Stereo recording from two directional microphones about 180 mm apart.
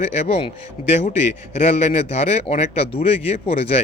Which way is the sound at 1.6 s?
35° left (ahead or behind).